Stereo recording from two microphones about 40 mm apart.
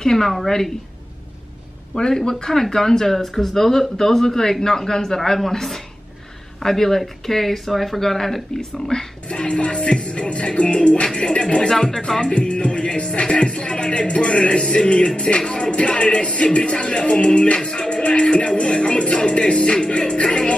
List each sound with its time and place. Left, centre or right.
0.0 s speech: centre
2.0 s speech: centre
9.3 s music: left
11.1 s speech: centre
11.3 s music: left
11.7 s speech: centre
12.2 s music: left
16.5 s speech: left